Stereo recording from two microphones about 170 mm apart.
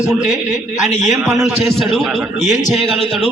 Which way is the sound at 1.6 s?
Centre (ahead or behind).